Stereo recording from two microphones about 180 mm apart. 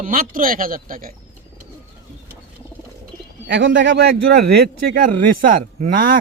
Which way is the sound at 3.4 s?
85° right.